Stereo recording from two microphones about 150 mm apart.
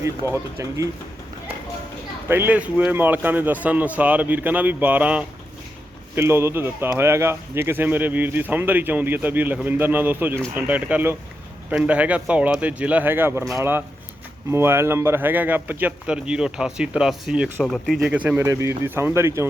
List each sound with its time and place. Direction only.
0.0 s speech: 15° right (ahead or behind)
2.3 s speech: 10° right (ahead or behind)